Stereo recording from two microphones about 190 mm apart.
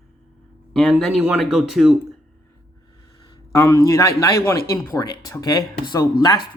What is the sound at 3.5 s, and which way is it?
Speech, 15° left (ahead or behind).